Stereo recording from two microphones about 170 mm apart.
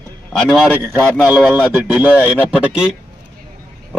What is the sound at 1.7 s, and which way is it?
A man's voice, 10° right (ahead or behind).